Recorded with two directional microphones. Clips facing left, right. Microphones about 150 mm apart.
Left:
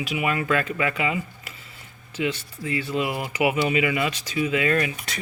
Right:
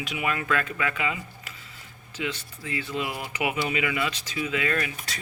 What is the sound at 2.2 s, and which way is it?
Speech, 40° left (ahead or behind).